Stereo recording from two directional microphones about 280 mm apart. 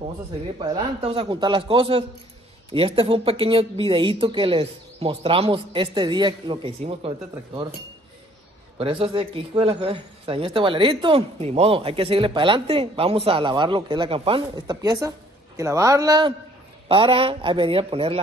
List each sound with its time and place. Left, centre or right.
0.6 s speech: centre
8.7 s speech: centre